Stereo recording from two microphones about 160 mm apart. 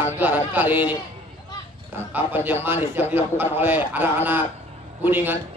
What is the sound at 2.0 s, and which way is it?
A man's voice, 15° right (ahead or behind).